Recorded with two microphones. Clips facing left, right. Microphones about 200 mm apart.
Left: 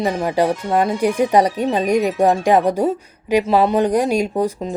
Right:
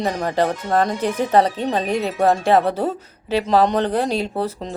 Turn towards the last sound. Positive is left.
turn(degrees=15)  # may be behind; listen again after turning